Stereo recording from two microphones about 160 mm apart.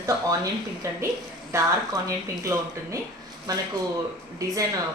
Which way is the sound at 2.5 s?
20° right (ahead or behind).